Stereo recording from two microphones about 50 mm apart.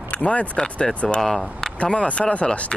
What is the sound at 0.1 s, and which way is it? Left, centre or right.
Speech, left.